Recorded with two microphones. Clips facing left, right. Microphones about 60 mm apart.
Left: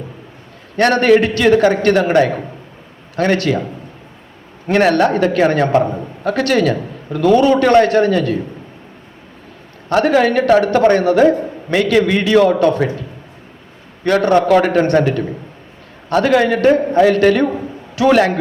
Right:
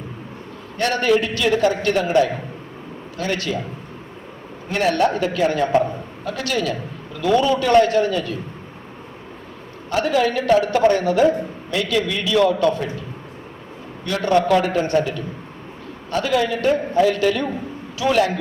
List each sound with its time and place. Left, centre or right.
0.8 s a man's voice: left
4.7 s a man's voice: left
9.9 s a man's voice: left
14.0 s a man's voice: left